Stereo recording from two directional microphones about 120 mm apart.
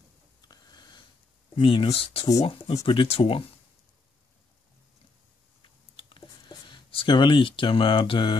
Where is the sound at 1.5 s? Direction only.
45° left (ahead or behind).